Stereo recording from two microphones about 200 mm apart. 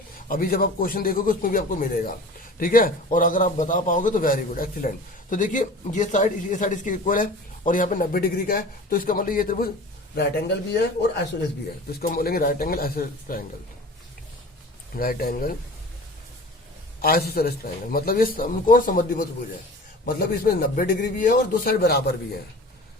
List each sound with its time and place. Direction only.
0.3 s a man's voice: 45° left (ahead or behind)
10.2 s a man's voice: 55° left (ahead or behind)
14.9 s a man's voice: 45° left (ahead or behind)
17.0 s a man's voice: 50° left (ahead or behind)